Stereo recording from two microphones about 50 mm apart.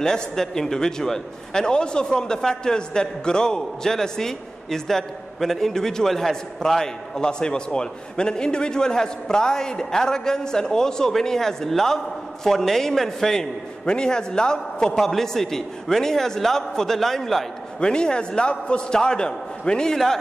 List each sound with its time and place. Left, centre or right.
0.0 s a man's voice: centre
17.7 s a man's voice: centre